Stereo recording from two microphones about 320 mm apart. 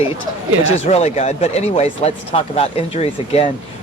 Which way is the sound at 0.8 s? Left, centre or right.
Left.